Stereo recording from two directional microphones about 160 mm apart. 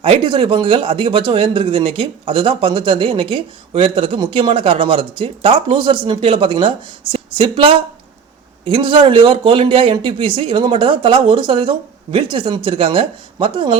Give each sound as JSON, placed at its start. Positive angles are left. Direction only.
{"t": 0.0, "sound": "speech", "side_deg": -35}